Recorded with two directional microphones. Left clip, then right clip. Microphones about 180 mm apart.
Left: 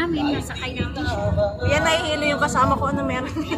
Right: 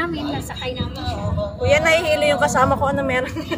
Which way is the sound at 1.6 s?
20° right (ahead or behind).